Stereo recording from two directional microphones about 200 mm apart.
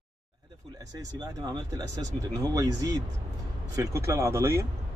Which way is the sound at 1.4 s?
20° right (ahead or behind).